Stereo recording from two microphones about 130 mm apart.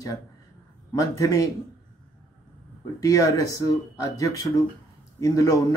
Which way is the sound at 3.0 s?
25° left (ahead or behind).